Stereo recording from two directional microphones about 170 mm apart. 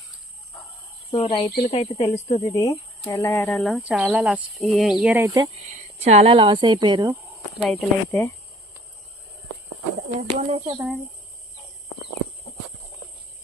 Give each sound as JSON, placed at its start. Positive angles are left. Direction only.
{"t": 1.1, "sound": "speech", "side_deg": 30}
{"t": 2.4, "sound": "speech", "side_deg": 20}
{"t": 6.1, "sound": "a woman's voice", "side_deg": -35}
{"t": 7.6, "sound": "speech", "side_deg": 0}
{"t": 10.2, "sound": "speech", "side_deg": -40}